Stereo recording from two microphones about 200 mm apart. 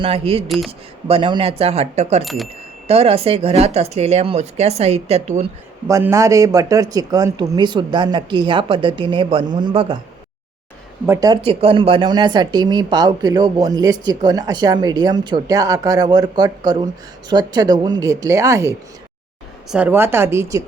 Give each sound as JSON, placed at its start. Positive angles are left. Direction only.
{"t": 0.0, "sound": "speech", "side_deg": -30}
{"t": 0.4, "sound": "speech", "side_deg": 0}
{"t": 1.0, "sound": "speech", "side_deg": -25}
{"t": 2.2, "sound": "speech", "side_deg": 0}
{"t": 2.8, "sound": "speech", "side_deg": -30}
{"t": 5.9, "sound": "speech", "side_deg": -15}
{"t": 11.0, "sound": "speech", "side_deg": -15}
{"t": 11.4, "sound": "speech", "side_deg": -30}
{"t": 19.7, "sound": "speech", "side_deg": -10}